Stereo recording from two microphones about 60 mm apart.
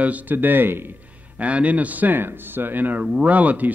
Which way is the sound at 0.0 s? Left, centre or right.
Right.